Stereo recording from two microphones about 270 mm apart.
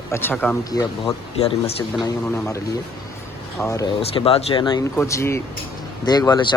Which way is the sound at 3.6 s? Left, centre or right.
Centre.